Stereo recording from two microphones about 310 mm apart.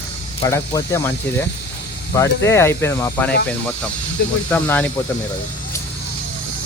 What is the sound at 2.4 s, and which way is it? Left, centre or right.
Speech, centre.